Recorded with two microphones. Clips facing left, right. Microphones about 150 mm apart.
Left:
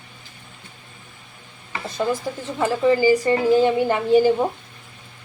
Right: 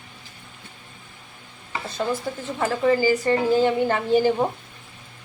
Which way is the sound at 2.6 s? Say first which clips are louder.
Left 3 dB; 15° left (ahead or behind).